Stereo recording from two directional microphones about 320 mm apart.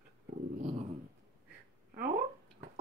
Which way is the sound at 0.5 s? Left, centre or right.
Right.